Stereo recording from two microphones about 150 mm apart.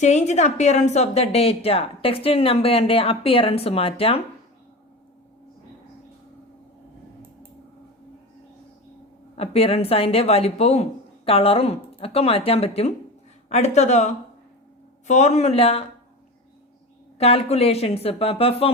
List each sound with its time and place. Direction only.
0.0 s speech: 50° left (ahead or behind)
9.4 s speech: 40° left (ahead or behind)
17.2 s speech: 40° left (ahead or behind)